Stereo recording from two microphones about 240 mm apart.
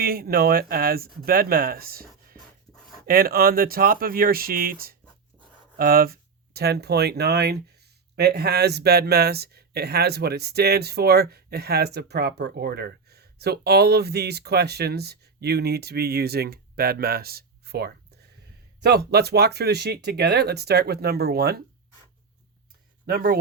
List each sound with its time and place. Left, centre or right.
0.0 s speech: right
23.0 s speech: right